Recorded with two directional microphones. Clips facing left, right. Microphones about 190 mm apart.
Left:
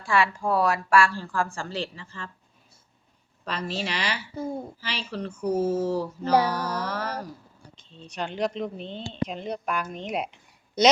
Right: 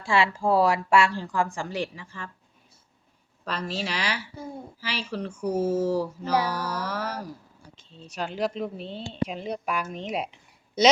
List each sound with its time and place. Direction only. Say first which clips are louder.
0.0 s a woman's voice: right 1 dB; 25° right (ahead or behind)
3.4 s speech: even; centre (ahead or behind)
4.8 s a sound: right 1 dB; 10° right (ahead or behind)
7.8 s speech: even; 5° right (ahead or behind)